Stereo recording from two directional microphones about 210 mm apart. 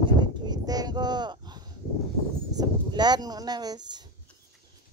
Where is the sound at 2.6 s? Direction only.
20° right (ahead or behind).